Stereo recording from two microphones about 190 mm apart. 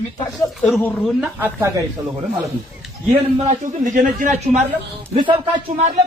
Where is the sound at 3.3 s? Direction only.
40° right (ahead or behind).